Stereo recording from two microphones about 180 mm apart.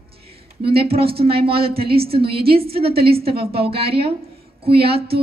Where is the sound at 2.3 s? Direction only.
60° right (ahead or behind).